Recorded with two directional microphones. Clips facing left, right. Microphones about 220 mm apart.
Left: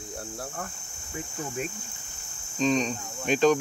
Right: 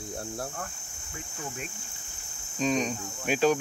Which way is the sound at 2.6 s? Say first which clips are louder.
Left 2 dB; 10° right (ahead or behind).